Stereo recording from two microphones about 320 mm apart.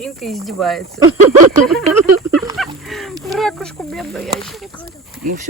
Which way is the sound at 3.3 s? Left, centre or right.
Centre.